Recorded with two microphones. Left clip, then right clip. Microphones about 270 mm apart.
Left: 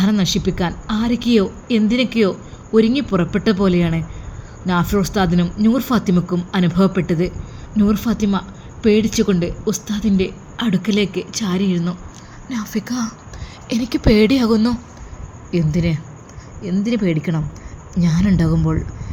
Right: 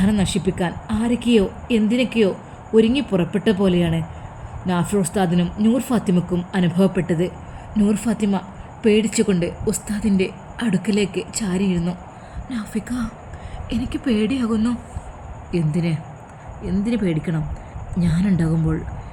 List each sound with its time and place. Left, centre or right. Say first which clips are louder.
0.0 s speech: left 3 dB; centre